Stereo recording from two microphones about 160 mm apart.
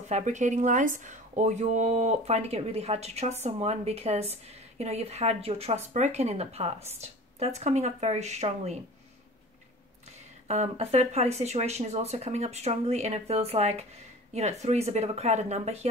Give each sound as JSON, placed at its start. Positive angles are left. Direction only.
{"t": 0.1, "sound": "speech", "side_deg": -50}
{"t": 10.5, "sound": "speech", "side_deg": -40}